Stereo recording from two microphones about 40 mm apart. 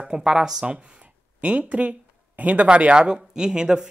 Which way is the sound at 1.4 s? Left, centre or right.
Right.